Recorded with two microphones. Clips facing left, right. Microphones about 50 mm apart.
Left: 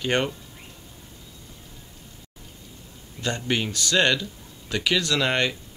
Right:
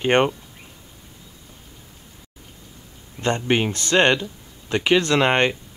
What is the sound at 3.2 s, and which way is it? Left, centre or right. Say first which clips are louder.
Speech: right 6 dB; right.